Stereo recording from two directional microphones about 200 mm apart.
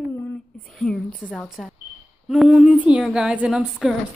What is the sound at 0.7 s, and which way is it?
A woman's voice, 5° left (ahead or behind).